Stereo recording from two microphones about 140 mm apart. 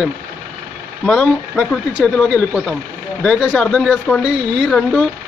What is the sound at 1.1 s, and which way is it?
Speech, 5° left (ahead or behind).